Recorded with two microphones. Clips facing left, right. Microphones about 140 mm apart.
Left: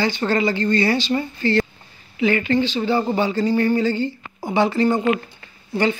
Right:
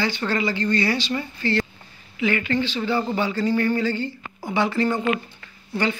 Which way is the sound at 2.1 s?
30° left (ahead or behind).